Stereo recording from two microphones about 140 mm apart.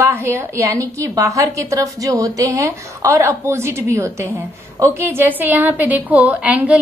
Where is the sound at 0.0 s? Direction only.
20° right (ahead or behind).